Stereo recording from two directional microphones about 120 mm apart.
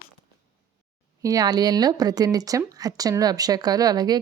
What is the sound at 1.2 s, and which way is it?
A woman's voice, 30° right (ahead or behind).